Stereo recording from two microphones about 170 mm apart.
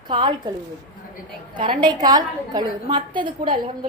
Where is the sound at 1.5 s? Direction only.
30° right (ahead or behind).